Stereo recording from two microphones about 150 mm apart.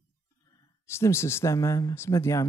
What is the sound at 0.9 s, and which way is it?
A man's voice, 15° left (ahead or behind).